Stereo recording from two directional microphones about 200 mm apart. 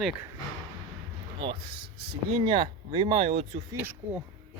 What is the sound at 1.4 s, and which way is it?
Speech, 25° right (ahead or behind).